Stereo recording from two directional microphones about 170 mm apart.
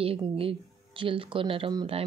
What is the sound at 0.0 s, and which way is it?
Speech, 35° right (ahead or behind).